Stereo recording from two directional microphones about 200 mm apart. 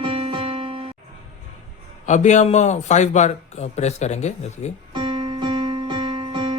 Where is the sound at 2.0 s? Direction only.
35° left (ahead or behind).